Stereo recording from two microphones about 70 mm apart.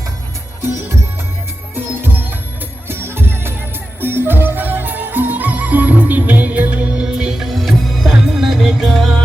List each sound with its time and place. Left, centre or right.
1.7 s music: right; by 9.1 s centre